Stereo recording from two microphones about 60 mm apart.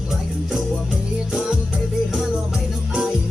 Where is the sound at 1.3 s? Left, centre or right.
Centre.